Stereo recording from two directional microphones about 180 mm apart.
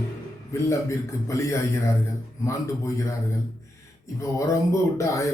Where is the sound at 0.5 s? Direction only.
15° left (ahead or behind).